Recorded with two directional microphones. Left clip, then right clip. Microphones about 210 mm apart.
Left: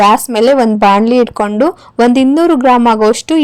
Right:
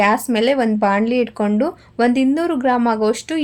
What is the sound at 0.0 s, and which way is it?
A woman's voice, 30° left (ahead or behind).